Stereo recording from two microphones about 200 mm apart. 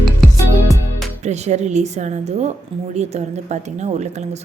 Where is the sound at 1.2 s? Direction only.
35° right (ahead or behind).